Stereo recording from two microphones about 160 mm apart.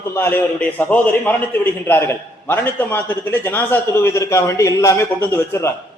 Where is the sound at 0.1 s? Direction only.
15° left (ahead or behind).